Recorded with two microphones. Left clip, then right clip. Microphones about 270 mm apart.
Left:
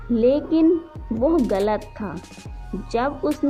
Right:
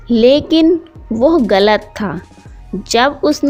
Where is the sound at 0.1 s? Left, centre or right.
Right.